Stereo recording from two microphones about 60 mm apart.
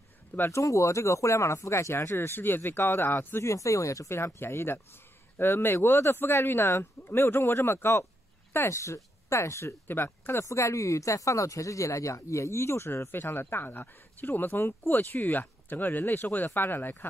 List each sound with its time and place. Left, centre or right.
0.5 s speech: left
3.4 s speech: left
4.4 s speech: left
8.5 s speech: left
9.8 s speech: left
10.4 s speech: left